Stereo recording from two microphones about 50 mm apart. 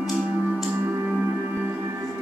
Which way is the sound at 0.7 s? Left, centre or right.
Right.